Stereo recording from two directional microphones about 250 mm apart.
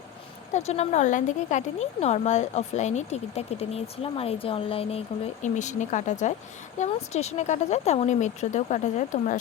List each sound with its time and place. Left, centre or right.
0.5 s speech: left